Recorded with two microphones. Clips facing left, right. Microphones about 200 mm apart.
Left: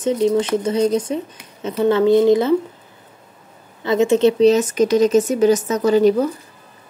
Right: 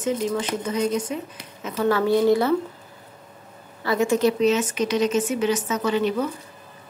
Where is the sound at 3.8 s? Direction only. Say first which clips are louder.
Left 6 dB; 25° left (ahead or behind).